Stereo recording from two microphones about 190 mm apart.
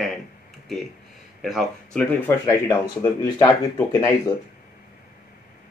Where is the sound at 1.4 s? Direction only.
Centre (ahead or behind).